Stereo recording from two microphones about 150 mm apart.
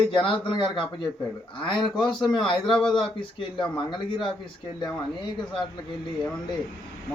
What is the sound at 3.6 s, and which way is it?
Speech, 30° left (ahead or behind).